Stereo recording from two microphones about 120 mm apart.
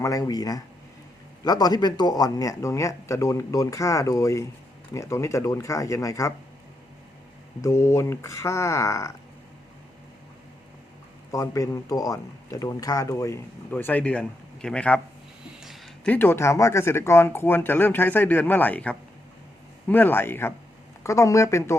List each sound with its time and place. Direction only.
0.0 s speech: 30° left (ahead or behind)
7.6 s speech: 25° left (ahead or behind)
11.3 s speech: 30° left (ahead or behind)
13.7 s speech: 15° left (ahead or behind)
16.0 s speech: 15° left (ahead or behind)